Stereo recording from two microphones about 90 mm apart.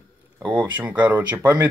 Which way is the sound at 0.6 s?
15° right (ahead or behind).